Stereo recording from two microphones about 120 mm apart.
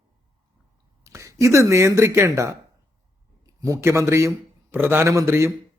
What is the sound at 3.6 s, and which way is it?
Speech, 25° right (ahead or behind).